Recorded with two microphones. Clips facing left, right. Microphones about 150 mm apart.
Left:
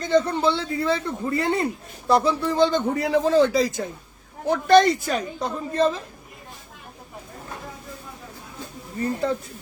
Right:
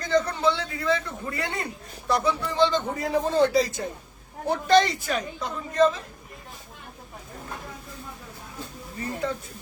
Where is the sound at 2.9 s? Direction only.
85° left.